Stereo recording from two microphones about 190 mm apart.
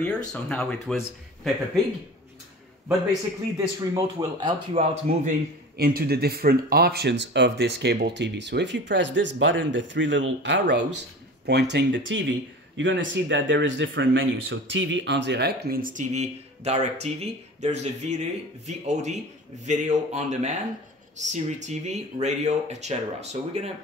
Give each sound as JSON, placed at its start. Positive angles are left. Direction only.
{"t": 0.0, "sound": "speech", "side_deg": 5}
{"t": 3.5, "sound": "a man's voice", "side_deg": -15}
{"t": 5.8, "sound": "speech", "side_deg": -55}